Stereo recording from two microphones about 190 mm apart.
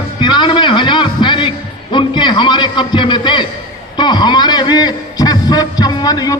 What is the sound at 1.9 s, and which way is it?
A man's voice, 25° left (ahead or behind).